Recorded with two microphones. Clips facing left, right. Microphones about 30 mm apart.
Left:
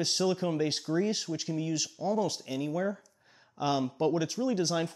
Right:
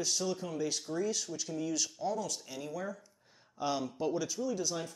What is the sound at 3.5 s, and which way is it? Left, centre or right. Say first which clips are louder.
Speech: left 5 dB; left.